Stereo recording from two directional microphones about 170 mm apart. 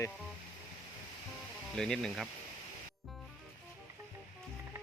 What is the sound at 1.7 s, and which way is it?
Speech, 5° left (ahead or behind).